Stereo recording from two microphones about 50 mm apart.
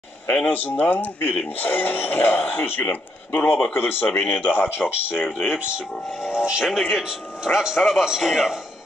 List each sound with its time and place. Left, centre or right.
0.5 s speech: left
5.1 s a man's voice: centre
5.6 s a man's voice: right